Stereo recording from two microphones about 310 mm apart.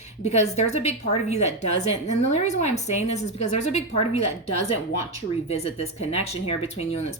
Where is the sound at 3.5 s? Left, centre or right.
Left.